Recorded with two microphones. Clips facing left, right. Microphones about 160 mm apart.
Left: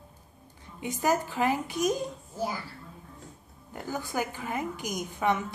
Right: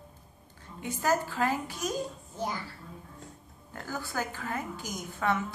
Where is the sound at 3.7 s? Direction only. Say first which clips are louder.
Left 3 dB; 15° left (ahead or behind).